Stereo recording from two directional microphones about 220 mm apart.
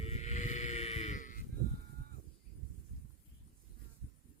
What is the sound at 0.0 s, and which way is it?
Sheep, 30° left (ahead or behind).